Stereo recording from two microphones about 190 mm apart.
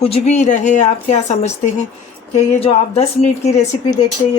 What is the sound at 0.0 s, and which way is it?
Speech, 35° left (ahead or behind).